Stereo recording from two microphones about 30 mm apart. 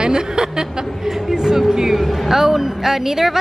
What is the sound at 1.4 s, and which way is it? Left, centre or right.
Speech, right.